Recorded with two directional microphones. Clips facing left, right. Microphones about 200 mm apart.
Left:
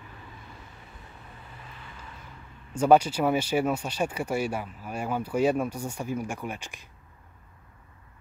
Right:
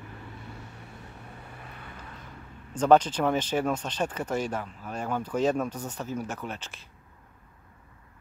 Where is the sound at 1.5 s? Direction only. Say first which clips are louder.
Right 2 dB; 60° right (ahead or behind).